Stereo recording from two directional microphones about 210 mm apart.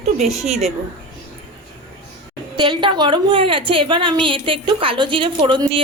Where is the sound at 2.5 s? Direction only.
20° right (ahead or behind).